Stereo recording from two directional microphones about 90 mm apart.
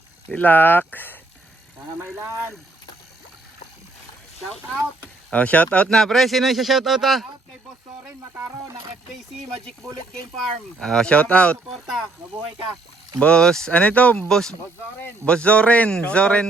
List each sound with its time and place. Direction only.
0.3 s speech: 20° left (ahead or behind)
2.0 s speech: 25° right (ahead or behind)
5.3 s speech: 15° left (ahead or behind); by 7.3 s centre (ahead or behind)
10.8 s speech: 5° left (ahead or behind)
11.7 s speech: 5° right (ahead or behind)
13.1 s speech: 10° left (ahead or behind)